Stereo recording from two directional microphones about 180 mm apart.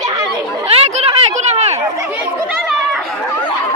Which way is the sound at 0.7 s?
35° right (ahead or behind).